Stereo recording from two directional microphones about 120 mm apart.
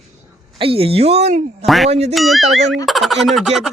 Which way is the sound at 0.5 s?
50° right (ahead or behind).